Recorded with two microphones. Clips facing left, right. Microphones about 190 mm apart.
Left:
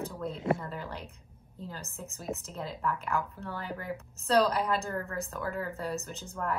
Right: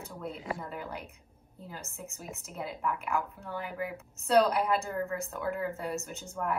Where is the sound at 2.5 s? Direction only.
10° right (ahead or behind).